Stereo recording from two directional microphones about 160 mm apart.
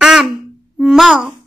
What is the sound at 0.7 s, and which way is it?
Music, centre (ahead or behind).